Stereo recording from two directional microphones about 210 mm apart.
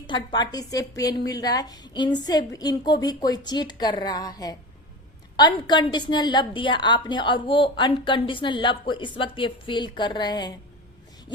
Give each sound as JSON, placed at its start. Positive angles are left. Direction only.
{"t": 0.1, "sound": "a woman's voice", "side_deg": 20}